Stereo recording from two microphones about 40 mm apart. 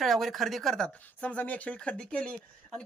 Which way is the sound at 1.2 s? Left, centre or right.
Left.